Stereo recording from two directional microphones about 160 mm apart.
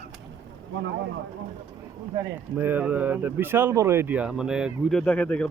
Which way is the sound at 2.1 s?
10° right (ahead or behind).